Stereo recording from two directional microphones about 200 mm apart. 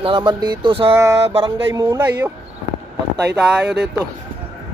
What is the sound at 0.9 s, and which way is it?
Speech, 15° right (ahead or behind).